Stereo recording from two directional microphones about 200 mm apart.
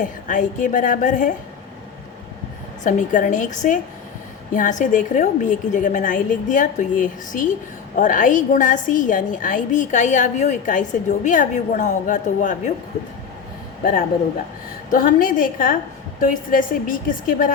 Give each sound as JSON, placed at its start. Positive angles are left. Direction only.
{"t": 0.0, "sound": "a woman's voice", "side_deg": 40}
{"t": 2.8, "sound": "a woman's voice", "side_deg": 40}
{"t": 14.8, "sound": "a woman's voice", "side_deg": 45}